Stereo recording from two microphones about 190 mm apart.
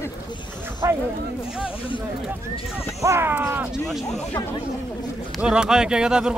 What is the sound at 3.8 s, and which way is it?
Speech, centre (ahead or behind).